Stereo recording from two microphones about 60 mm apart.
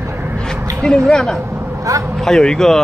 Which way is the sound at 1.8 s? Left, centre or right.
Right.